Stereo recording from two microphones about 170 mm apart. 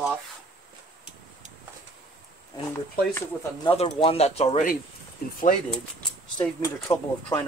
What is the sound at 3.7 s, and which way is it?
Speech, 35° left (ahead or behind).